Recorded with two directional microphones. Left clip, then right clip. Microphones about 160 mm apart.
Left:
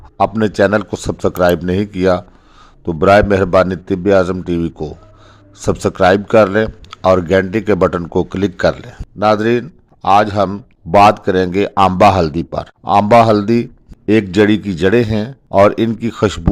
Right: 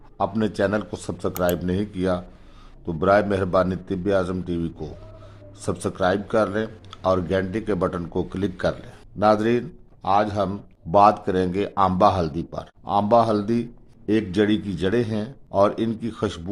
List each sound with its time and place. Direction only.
0.2 s speech: 35° left (ahead or behind)
9.1 s a man's voice: 30° left (ahead or behind); by 16.4 s 45° left (ahead or behind)